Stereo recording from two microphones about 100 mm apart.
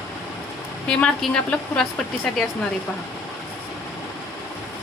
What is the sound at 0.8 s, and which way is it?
A woman's voice, 10° left (ahead or behind).